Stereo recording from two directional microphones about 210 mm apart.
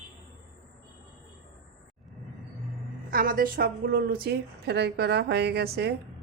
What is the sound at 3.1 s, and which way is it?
A woman's voice, 45° right (ahead or behind).